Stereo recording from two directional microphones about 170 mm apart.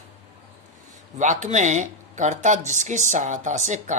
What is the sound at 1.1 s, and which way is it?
Speech, 45° right (ahead or behind).